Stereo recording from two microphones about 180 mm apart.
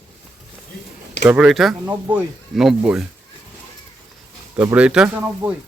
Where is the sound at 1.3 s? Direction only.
5° right (ahead or behind).